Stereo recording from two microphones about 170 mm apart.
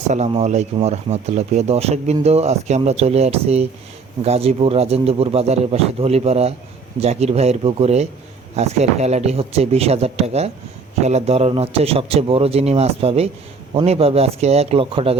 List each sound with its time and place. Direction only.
0.1 s a man's voice: 40° right (ahead or behind)